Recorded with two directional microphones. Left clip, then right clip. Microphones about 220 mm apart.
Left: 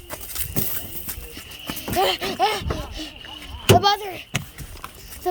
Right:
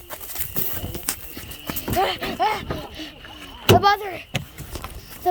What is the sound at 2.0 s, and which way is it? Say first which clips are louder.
Speech: left 1 dB; 25° left (ahead or behind).